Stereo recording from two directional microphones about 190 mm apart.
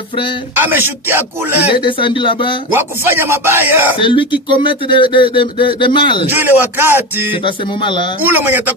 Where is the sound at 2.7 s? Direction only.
10° right (ahead or behind).